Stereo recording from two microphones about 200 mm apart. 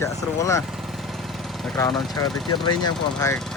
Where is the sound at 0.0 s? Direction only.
15° left (ahead or behind).